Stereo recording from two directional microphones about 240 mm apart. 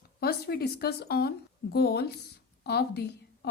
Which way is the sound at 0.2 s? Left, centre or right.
Left.